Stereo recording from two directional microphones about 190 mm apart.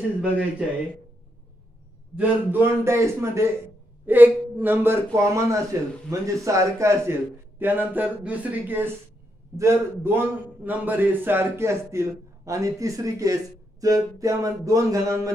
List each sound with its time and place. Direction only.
2.1 s a man's voice: 10° right (ahead or behind)